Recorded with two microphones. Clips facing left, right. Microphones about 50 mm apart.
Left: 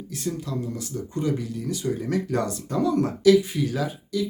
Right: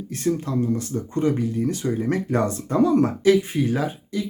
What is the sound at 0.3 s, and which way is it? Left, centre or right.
Speech, right.